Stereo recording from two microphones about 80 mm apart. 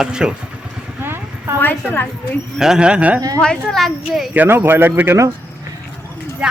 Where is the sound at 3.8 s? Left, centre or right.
Centre.